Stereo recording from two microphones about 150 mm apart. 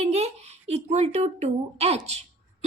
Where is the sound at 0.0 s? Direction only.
45° right (ahead or behind).